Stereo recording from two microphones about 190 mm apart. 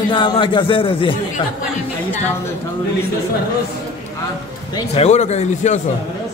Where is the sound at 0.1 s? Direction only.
25° left (ahead or behind).